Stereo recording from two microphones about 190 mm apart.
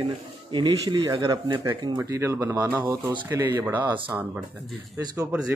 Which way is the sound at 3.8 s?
25° right (ahead or behind).